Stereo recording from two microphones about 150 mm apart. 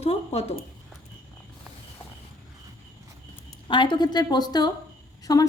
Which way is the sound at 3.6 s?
35° left (ahead or behind).